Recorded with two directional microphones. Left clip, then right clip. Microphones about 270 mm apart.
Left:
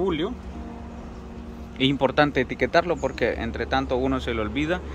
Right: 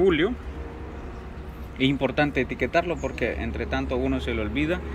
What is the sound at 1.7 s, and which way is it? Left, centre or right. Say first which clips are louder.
Speech: left 3 dB; centre.